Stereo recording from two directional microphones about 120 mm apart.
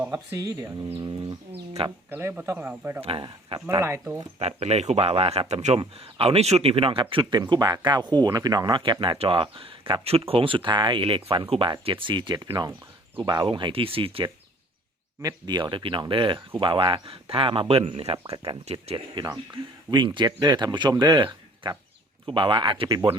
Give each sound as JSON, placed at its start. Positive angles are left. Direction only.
{"t": 0.1, "sound": "speech", "side_deg": -25}
{"t": 0.9, "sound": "speech", "side_deg": -40}
{"t": 1.3, "sound": "speech", "side_deg": -55}
{"t": 2.0, "sound": "speech", "side_deg": -15}
{"t": 3.0, "sound": "speech", "side_deg": -50}
{"t": 3.2, "sound": "speech", "side_deg": -40}
{"t": 3.8, "sound": "speech", "side_deg": -20}
{"t": 4.4, "sound": "speech", "side_deg": -60}
{"t": 15.2, "sound": "speech", "side_deg": -35}
{"t": 19.1, "sound": "speech", "side_deg": -30}
{"t": 22.3, "sound": "speech", "side_deg": -45}